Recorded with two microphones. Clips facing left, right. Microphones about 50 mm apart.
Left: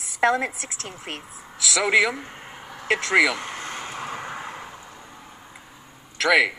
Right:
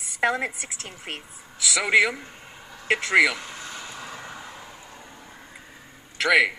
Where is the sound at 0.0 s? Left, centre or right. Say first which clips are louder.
Left 3 dB; centre.